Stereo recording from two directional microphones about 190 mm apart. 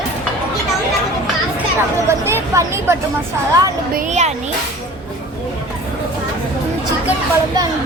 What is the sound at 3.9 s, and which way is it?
Speech, 35° right (ahead or behind).